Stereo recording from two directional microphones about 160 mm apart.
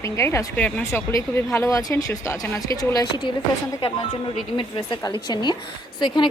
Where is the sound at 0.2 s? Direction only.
15° left (ahead or behind).